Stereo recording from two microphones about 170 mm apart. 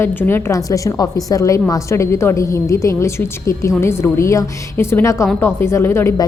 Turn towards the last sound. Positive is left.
turn(degrees=15)  # may be behind; listen again after turning